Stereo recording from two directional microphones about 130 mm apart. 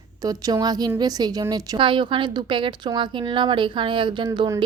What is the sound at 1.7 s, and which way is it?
A woman's voice, 40° right (ahead or behind).